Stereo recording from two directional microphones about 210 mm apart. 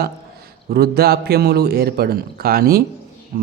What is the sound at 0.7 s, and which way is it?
Speech, 50° right (ahead or behind).